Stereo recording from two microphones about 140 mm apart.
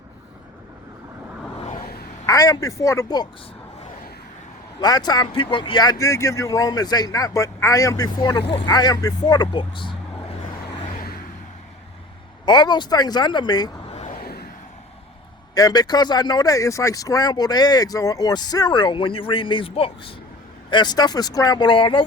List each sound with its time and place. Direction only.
2.2 s speech: 25° left (ahead or behind)
4.8 s speech: 30° left (ahead or behind)
12.5 s speech: 30° left (ahead or behind)
15.5 s speech: 25° left (ahead or behind)